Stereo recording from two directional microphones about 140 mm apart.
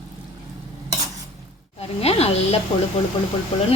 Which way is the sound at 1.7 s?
45° left (ahead or behind).